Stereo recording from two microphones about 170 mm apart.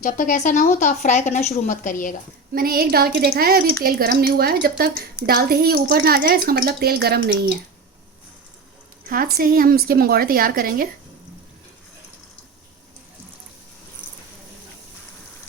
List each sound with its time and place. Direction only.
0.0 s speech: 50° left (ahead or behind)
2.5 s a woman's voice: 60° right (ahead or behind)
9.0 s a woman's voice: 60° right (ahead or behind)